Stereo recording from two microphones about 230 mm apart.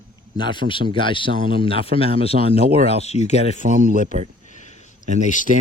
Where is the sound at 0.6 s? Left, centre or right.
Right.